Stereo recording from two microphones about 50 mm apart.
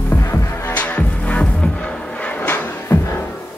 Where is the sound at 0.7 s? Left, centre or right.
Left.